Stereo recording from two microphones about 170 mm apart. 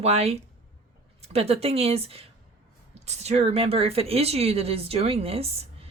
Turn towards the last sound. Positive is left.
turn(degrees=-35)  # may be behind; listen again after turning